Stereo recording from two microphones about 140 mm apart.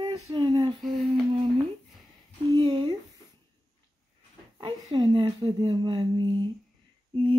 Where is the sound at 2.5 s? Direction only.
35° right (ahead or behind).